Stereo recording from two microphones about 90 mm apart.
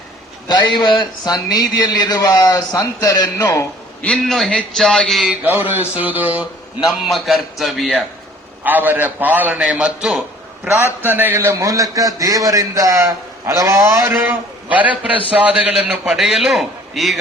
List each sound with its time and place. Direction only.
0.9 s a man's voice: 55° left (ahead or behind); by 3.4 s 35° left (ahead or behind)
4.0 s a man's voice: 5° left (ahead or behind)
5.3 s a man's voice: 20° right (ahead or behind)
7.0 s a man's voice: centre (ahead or behind)
8.6 s a man's voice: 20° right (ahead or behind); by 10.7 s 5° right (ahead or behind)
11.0 s a man's voice: 20° right (ahead or behind)
11.5 s a man's voice: 35° right (ahead or behind); by 17.2 s centre (ahead or behind)